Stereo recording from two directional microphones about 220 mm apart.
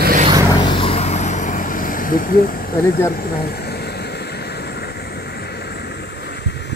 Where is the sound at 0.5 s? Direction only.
20° left (ahead or behind).